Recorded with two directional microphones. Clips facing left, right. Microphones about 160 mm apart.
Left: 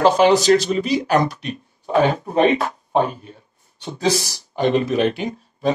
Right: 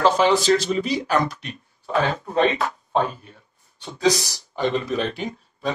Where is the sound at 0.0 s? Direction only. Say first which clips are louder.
Left 4 dB; 40° left (ahead or behind).